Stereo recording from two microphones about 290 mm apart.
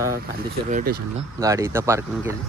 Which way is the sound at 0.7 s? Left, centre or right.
Right.